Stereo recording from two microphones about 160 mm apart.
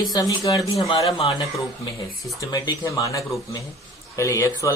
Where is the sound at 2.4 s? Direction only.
20° left (ahead or behind).